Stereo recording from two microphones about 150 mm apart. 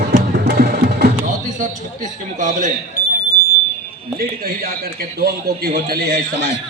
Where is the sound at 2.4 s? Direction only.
55° right (ahead or behind).